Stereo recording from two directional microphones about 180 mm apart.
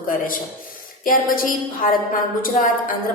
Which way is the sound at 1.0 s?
50° left (ahead or behind).